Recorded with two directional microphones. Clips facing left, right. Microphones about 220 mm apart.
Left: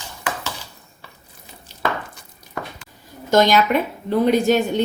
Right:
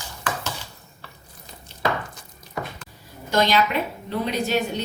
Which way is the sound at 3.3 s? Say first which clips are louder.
Left 5 dB; 45° left (ahead or behind).